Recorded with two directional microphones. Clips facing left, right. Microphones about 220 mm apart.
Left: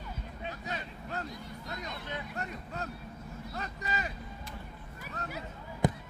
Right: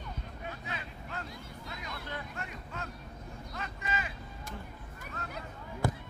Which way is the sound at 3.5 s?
40° left (ahead or behind).